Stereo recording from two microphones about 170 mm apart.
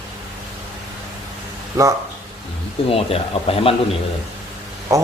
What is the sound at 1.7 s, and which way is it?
Speech, 20° right (ahead or behind).